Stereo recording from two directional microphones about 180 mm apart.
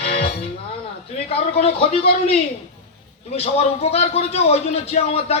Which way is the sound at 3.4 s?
35° left (ahead or behind).